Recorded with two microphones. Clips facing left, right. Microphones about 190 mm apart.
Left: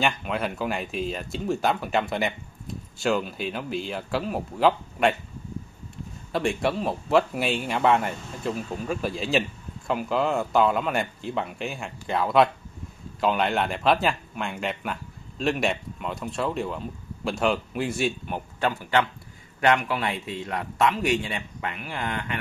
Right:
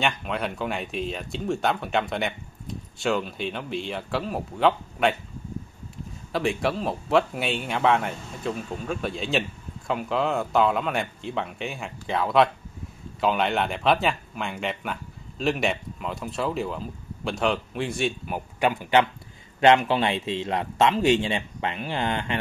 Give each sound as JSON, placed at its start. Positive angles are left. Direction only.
{"t": 0.0, "sound": "speech", "side_deg": 0}
{"t": 6.3, "sound": "a man's voice", "side_deg": 0}